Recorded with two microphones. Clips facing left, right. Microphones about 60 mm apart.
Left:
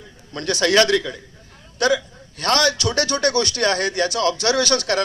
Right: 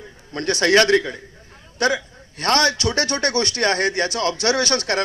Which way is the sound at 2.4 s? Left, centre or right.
Right.